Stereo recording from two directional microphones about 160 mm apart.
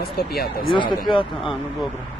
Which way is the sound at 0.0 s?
75° left (ahead or behind).